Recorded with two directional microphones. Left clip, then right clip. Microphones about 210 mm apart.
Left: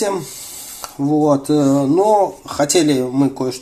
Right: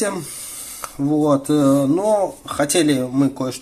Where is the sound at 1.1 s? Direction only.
30° right (ahead or behind).